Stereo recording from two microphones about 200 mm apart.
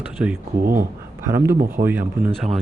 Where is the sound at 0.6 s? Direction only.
45° right (ahead or behind).